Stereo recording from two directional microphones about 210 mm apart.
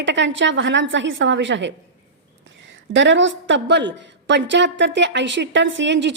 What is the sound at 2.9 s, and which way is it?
A woman's voice, 60° right (ahead or behind).